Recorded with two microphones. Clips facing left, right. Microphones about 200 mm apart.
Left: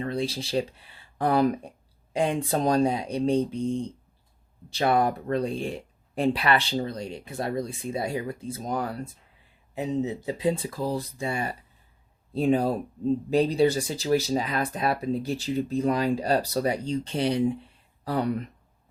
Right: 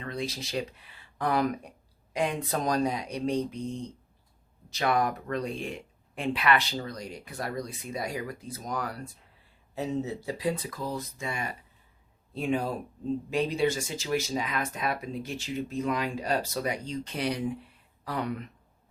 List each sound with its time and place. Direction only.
0.0 s speech: 30° left (ahead or behind)